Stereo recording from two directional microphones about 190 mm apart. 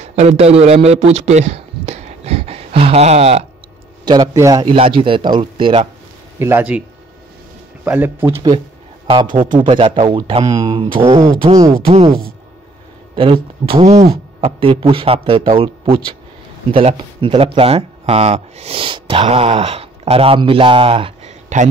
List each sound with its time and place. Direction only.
0.0 s a man's voice: 35° right (ahead or behind)
4.0 s a man's voice: 20° right (ahead or behind)
6.4 s speech: 10° right (ahead or behind)
7.8 s speech: 10° right (ahead or behind)
9.6 s a man's voice: 25° right (ahead or behind)
11.2 s speech: 35° right (ahead or behind)
12.1 s speech: 50° right (ahead or behind)
13.1 s a man's voice: 30° right (ahead or behind)